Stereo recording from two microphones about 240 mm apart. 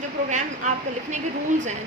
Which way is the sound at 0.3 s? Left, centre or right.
Right.